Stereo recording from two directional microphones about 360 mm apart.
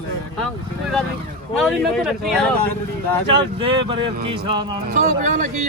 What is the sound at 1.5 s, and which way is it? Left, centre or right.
Speech, centre.